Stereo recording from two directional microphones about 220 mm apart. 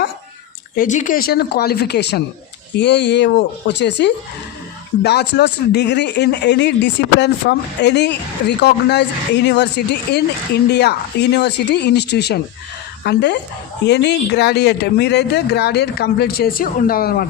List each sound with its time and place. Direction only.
0.8 s speech: 35° left (ahead or behind)